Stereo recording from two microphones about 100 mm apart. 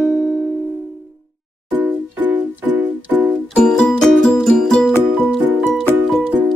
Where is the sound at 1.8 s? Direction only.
15° right (ahead or behind).